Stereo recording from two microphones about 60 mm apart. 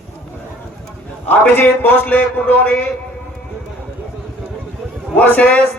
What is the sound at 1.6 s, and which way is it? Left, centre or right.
Speech, left.